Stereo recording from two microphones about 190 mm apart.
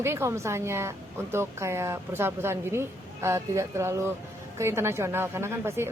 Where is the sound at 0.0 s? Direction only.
15° right (ahead or behind).